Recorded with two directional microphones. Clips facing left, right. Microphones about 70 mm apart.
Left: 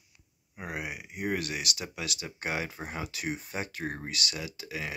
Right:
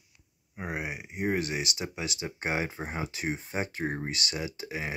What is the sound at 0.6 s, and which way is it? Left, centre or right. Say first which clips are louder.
Speech: right 2 dB; right.